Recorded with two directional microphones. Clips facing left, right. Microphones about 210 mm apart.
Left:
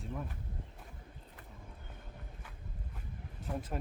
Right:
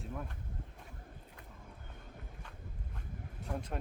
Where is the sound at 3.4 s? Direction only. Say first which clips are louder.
Left 1 dB; 5° left (ahead or behind).